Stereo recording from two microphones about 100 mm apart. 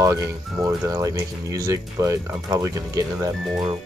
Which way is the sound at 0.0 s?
30° right (ahead or behind).